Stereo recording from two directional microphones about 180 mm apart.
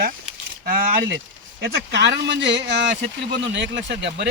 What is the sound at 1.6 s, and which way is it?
Speech, 75° right (ahead or behind).